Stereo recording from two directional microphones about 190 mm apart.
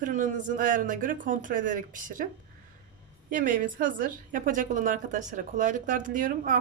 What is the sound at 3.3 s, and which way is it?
A woman's voice, 45° right (ahead or behind).